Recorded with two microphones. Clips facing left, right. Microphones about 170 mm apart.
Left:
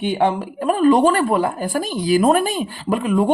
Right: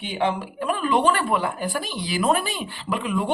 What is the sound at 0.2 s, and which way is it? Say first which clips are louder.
Speech: left 5 dB; 45° left (ahead or behind).